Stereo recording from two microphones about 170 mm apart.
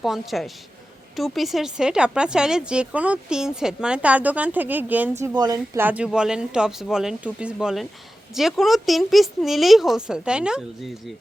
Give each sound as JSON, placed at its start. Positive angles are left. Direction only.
{"t": 0.0, "sound": "speech", "side_deg": 0}
{"t": 5.2, "sound": "speech", "side_deg": -25}
{"t": 5.8, "sound": "speech", "side_deg": -10}